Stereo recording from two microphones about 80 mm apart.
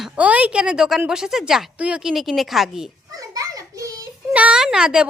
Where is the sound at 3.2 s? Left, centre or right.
Right.